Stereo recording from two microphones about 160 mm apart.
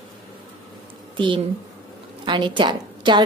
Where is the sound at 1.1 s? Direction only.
30° right (ahead or behind).